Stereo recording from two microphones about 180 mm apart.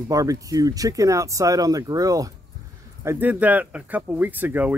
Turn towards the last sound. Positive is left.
turn(degrees=-10)  # may be behind; listen again after turning